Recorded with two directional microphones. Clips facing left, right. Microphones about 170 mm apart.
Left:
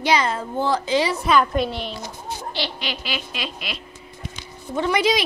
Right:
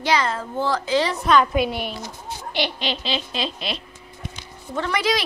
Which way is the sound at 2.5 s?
20° right (ahead or behind).